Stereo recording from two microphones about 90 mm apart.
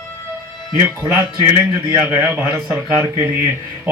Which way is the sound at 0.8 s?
25° right (ahead or behind).